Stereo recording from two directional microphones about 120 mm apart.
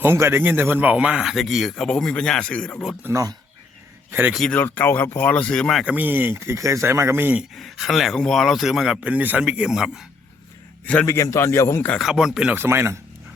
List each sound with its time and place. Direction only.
0.0 s speech: 20° right (ahead or behind); by 2.9 s 5° left (ahead or behind)
3.0 s speech: 20° right (ahead or behind)
4.4 s speech: 10° left (ahead or behind)
5.8 s speech: 10° right (ahead or behind)
7.5 s speech: centre (ahead or behind)
11.0 s a man's voice: 25° left (ahead or behind)
11.9 s speech: 5° right (ahead or behind)
12.5 s speech: 20° right (ahead or behind)